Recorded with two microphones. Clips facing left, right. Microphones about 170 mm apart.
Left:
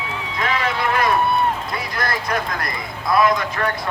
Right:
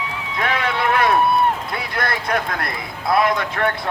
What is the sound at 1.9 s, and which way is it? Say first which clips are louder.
Clip-clop: right 2 dB; 60° right (ahead or behind).